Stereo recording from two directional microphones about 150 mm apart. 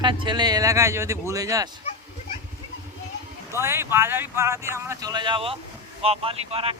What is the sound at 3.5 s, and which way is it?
Speech, 15° right (ahead or behind).